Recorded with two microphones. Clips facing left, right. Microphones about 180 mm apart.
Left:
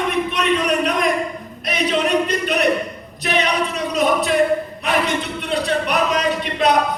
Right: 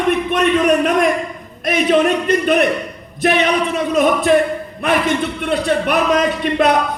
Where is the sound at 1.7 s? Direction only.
50° right (ahead or behind).